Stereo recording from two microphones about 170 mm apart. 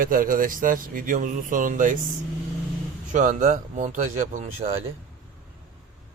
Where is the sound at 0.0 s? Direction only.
55° right (ahead or behind).